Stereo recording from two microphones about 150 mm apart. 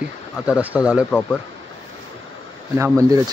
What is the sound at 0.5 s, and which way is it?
Speech, 10° right (ahead or behind).